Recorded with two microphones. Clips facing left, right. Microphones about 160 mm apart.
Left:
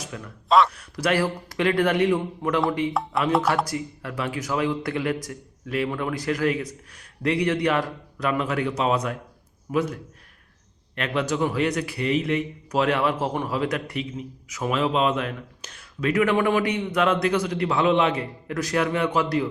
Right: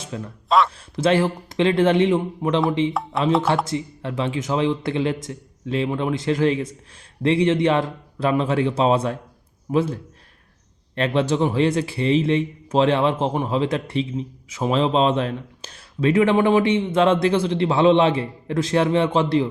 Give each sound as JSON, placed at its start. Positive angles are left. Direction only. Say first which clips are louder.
{"t": 0.0, "sound": "a sound", "louder": "right 5 dB", "side_deg": -25}
{"t": 0.4, "sound": "a man's voice", "louder": "even", "side_deg": 0}
{"t": 0.7, "sound": "speech", "louder": "right 5 dB", "side_deg": -25}